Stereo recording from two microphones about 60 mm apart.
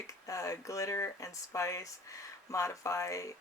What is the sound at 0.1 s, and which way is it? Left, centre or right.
Speech, left.